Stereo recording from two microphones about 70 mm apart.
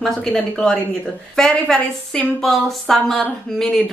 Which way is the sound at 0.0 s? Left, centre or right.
Centre.